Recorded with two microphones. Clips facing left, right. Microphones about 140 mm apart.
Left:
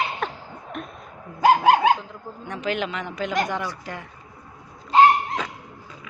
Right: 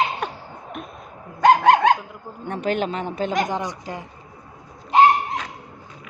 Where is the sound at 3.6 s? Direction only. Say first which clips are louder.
Right 2 dB; 20° right (ahead or behind).